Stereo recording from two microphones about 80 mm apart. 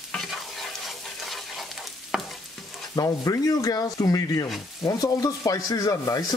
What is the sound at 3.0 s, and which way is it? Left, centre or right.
Speech, left.